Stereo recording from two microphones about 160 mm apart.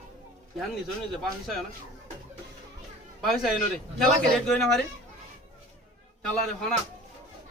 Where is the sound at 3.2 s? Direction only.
Centre (ahead or behind).